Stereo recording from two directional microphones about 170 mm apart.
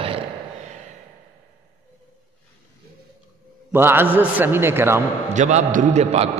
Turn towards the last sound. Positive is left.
turn(degrees=-40)  # may be behind; listen again after turning